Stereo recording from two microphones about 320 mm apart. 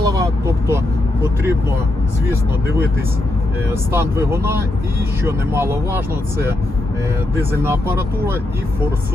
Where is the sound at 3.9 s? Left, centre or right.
Centre.